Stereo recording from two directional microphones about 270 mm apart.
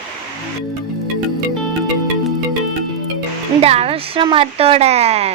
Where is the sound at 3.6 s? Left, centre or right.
Right.